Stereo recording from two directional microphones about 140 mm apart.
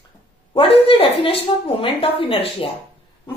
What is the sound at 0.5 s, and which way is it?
A woman's voice, 40° left (ahead or behind).